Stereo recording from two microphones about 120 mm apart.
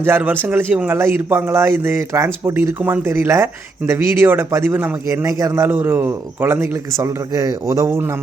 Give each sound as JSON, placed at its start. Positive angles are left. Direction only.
{"t": 0.0, "sound": "speech", "side_deg": -15}